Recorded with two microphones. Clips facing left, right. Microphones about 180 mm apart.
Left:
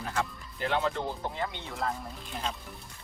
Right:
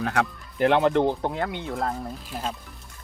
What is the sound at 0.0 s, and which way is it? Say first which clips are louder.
Speech: right 8 dB; 70° right (ahead or behind).